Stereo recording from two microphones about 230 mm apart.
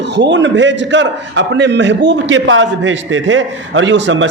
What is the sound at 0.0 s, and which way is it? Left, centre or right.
A man's voice, right.